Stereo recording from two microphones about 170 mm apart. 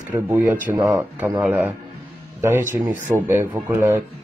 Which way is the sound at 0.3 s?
10° right (ahead or behind).